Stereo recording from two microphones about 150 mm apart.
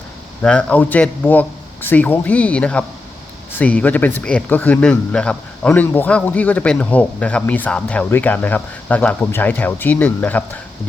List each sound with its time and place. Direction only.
0.4 s speech: 10° left (ahead or behind)